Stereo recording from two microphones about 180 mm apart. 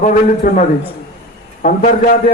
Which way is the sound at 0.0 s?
45° left (ahead or behind).